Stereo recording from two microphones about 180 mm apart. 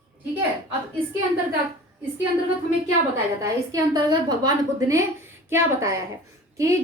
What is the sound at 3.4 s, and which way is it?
A woman's voice, 20° right (ahead or behind).